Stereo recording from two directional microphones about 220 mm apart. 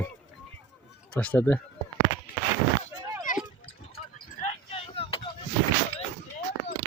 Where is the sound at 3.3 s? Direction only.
35° left (ahead or behind).